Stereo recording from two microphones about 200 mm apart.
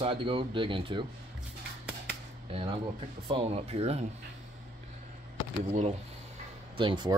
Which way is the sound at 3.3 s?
30° right (ahead or behind).